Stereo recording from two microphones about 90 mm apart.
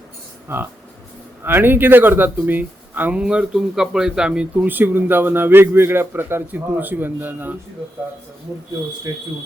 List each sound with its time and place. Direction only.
0.4 s speech: 25° right (ahead or behind)